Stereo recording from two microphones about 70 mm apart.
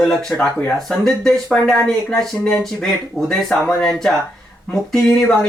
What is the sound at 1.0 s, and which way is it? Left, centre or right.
Speech, centre.